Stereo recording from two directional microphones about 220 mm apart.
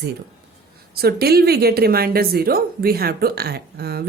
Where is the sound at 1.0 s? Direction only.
45° right (ahead or behind).